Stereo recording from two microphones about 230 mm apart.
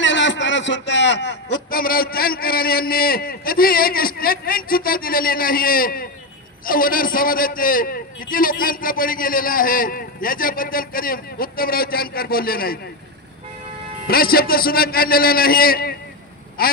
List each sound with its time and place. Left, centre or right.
0.0 s a man's voice: left
14.0 s a man's voice: left